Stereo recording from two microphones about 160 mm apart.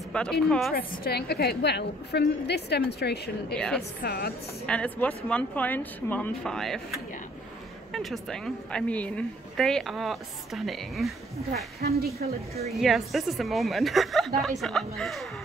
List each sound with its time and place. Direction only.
0.1 s a woman's voice: 5° left (ahead or behind)
0.7 s a woman's voice: 65° left (ahead or behind); by 3.5 s 90° left
3.5 s speech: 5° left (ahead or behind)
4.0 s speech: 80° left
4.6 s a woman's voice: 10° left (ahead or behind)
12.2 s a woman's voice: 70° right (ahead or behind)
12.6 s a woman's voice: centre (ahead or behind)